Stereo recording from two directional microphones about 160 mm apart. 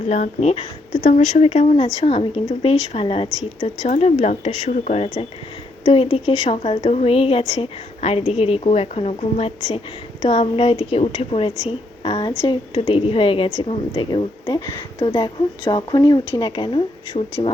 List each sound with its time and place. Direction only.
0.1 s speech: 45° left (ahead or behind)